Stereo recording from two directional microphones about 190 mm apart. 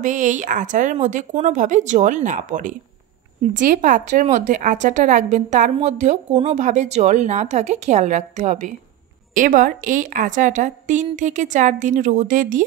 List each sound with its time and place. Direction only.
0.0 s a woman's voice: 40° right (ahead or behind)